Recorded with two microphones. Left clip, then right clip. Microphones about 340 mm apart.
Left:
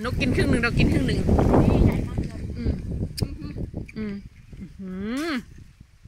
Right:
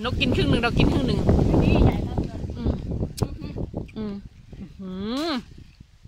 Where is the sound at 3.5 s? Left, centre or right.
Right.